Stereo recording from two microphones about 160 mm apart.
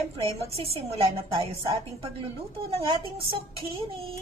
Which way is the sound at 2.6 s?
35° right (ahead or behind).